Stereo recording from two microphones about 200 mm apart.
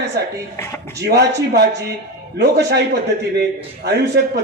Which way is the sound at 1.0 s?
55° right (ahead or behind).